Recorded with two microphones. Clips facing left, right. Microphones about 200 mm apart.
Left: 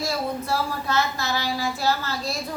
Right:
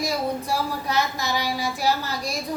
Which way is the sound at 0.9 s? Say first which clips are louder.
Even; 15° right (ahead or behind).